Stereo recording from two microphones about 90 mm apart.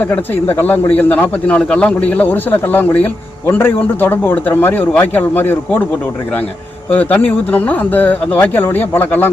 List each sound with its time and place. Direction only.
0.1 s a man's voice: 20° left (ahead or behind)
6.9 s speech: 20° left (ahead or behind)